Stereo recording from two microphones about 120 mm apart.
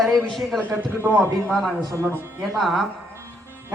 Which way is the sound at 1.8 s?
25° right (ahead or behind).